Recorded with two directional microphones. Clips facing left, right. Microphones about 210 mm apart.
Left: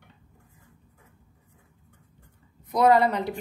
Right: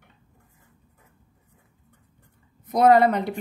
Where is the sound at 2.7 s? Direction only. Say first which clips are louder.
Right 3 dB; 50° right (ahead or behind).